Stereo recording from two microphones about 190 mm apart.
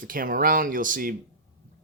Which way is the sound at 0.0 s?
45° right (ahead or behind).